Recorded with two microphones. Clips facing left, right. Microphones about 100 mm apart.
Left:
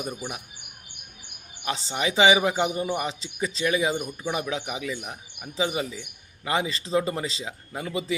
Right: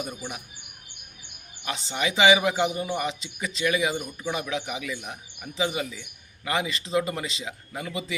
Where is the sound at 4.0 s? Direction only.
15° left (ahead or behind).